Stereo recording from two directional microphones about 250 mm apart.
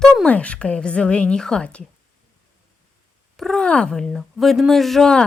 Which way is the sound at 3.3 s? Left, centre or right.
Centre.